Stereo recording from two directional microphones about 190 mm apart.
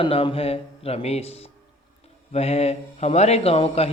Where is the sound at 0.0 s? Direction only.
30° left (ahead or behind).